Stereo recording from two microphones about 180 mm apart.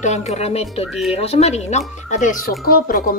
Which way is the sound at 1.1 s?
35° left (ahead or behind).